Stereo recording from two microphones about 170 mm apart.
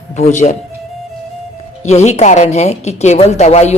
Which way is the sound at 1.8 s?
40° left (ahead or behind).